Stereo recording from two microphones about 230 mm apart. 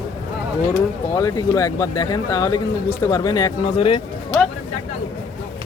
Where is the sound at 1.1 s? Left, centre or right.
Centre.